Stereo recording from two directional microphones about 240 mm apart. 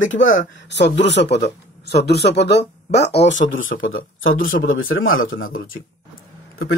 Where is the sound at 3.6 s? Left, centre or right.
Left.